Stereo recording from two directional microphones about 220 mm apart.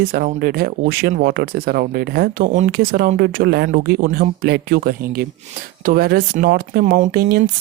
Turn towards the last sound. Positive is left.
turn(degrees=-40)  # may be behind; listen again after turning